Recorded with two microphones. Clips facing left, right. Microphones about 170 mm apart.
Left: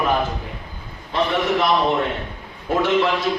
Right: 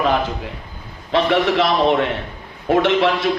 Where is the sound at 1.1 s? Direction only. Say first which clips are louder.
Right 4 dB; 90° right.